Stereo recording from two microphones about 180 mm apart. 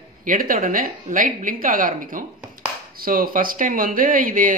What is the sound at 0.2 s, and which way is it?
Speech, 50° right (ahead or behind).